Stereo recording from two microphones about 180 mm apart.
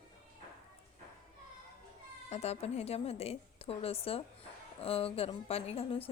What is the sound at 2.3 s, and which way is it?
A woman's voice, 35° left (ahead or behind).